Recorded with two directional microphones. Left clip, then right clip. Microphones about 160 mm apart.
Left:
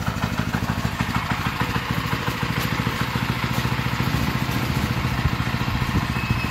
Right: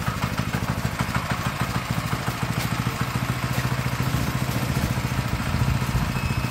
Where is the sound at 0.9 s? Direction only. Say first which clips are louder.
Left 2 dB; 55° right (ahead or behind); by 4.4 s 90° right.